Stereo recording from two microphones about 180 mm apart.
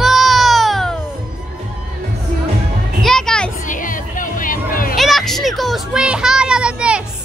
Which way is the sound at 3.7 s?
50° left (ahead or behind).